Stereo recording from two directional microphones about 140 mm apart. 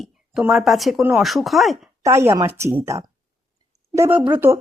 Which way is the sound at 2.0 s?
20° right (ahead or behind).